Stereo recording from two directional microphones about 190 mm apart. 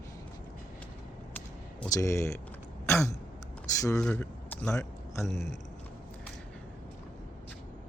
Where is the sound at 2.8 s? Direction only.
15° left (ahead or behind).